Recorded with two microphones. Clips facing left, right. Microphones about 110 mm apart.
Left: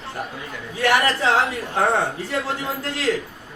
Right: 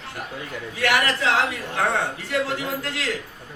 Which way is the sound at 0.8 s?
35° left (ahead or behind).